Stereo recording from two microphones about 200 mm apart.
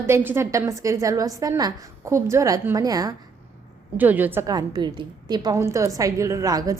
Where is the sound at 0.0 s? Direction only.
10° right (ahead or behind).